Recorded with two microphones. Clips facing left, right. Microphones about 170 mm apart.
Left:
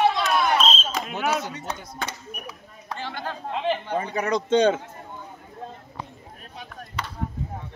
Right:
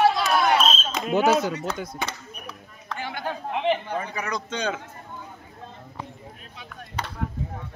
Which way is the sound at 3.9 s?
25° left (ahead or behind).